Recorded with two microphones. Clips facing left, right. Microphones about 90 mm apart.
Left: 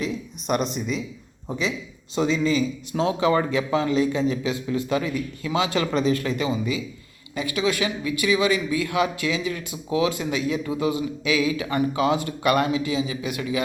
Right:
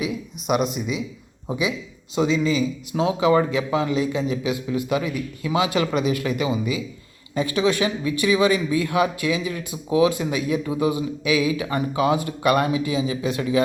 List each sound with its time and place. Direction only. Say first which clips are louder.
0.0 s speech: right 1 dB; 5° right (ahead or behind)
7.3 s speech: right 3 dB; 30° right (ahead or behind)